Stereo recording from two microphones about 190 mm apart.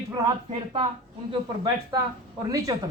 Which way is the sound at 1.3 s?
20° right (ahead or behind).